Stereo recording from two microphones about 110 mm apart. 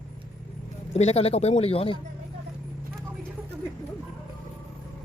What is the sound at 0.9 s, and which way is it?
Speech, 70° left (ahead or behind).